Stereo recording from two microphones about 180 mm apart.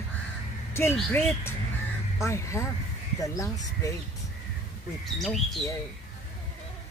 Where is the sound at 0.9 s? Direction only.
10° left (ahead or behind).